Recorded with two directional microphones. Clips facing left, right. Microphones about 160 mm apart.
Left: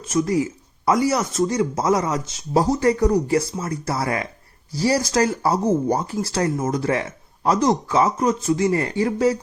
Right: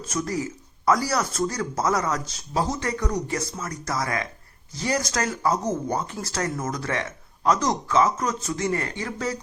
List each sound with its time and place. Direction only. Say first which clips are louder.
0.1 s speech: left 8 dB; 25° left (ahead or behind)